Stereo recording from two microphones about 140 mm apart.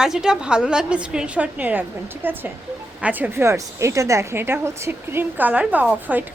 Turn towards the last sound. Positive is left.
turn(degrees=-10)  # may be behind; listen again after turning